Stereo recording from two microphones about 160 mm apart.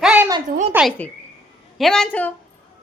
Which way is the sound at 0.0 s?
10° right (ahead or behind).